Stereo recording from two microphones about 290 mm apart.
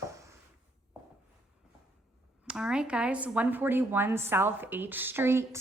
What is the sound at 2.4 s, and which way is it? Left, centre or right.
Speech, centre.